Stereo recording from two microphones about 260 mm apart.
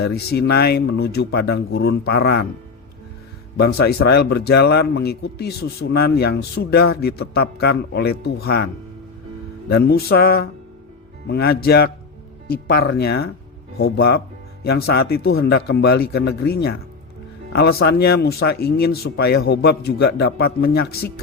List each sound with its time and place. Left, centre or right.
0.0 s a man's voice: left
3.6 s a man's voice: left
9.6 s a man's voice: left